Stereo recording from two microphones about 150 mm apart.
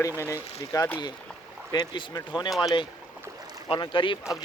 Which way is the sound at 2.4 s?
Centre (ahead or behind).